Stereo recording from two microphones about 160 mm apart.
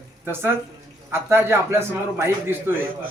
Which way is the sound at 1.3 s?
15° right (ahead or behind).